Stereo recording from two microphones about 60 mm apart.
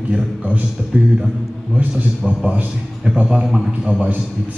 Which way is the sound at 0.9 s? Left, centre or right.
Right.